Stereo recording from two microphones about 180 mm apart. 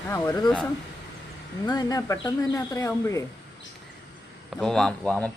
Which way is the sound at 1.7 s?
20° left (ahead or behind).